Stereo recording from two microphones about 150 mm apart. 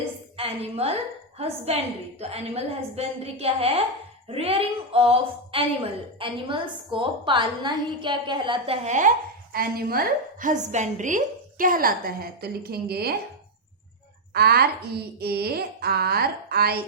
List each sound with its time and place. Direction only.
0.3 s a woman's voice: 40° right (ahead or behind); by 13.1 s 90° right
14.3 s a woman's voice: 90° right